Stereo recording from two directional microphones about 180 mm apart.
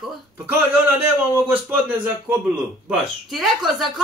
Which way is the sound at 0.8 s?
10° right (ahead or behind).